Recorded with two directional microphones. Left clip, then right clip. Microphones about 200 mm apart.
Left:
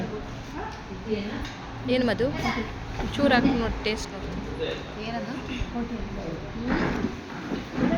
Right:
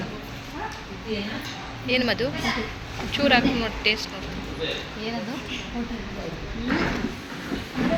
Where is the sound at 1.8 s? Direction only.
15° left (ahead or behind).